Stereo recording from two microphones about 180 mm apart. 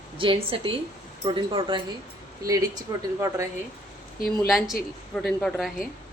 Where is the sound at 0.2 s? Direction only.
30° right (ahead or behind).